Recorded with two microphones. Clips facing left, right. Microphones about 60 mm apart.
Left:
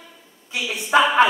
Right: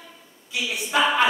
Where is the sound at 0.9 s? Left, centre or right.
Left.